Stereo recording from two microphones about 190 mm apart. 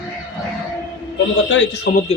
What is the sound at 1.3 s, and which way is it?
Speech, 80° left.